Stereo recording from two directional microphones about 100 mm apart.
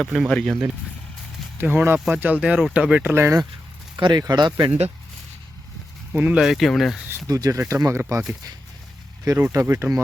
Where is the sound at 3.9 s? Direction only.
50° right (ahead or behind).